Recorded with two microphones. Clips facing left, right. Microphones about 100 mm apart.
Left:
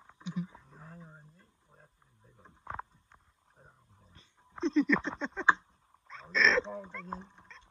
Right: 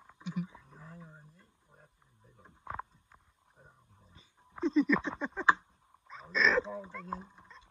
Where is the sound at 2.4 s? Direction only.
Centre (ahead or behind).